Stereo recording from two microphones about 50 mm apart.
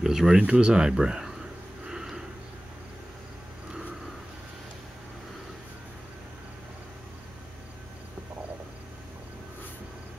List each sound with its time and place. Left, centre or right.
0.0 s speech: centre
0.4 s speech: centre
1.9 s a sound: centre